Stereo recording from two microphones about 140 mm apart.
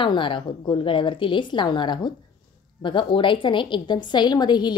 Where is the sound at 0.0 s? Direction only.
35° left (ahead or behind).